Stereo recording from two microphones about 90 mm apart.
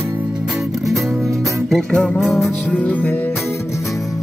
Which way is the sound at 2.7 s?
15° left (ahead or behind).